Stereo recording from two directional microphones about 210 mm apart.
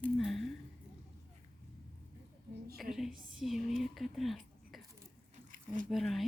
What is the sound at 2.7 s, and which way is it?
Speech, 45° right (ahead or behind).